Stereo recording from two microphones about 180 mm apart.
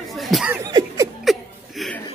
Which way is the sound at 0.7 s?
20° right (ahead or behind).